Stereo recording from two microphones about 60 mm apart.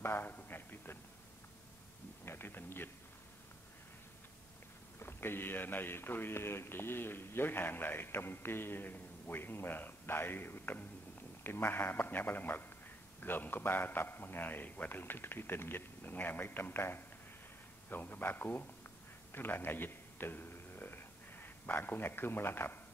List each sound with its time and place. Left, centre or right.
0.0 s a sound: left
2.2 s speech: left
4.9 s a man's voice: left